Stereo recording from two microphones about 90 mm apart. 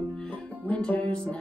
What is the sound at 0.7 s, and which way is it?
Music, 15° left (ahead or behind).